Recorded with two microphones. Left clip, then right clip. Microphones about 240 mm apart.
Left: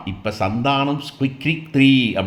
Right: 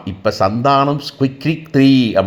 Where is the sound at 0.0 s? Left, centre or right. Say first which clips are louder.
Right 7 dB; centre.